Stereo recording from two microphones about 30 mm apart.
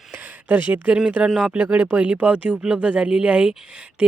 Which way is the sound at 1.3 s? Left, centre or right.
Right.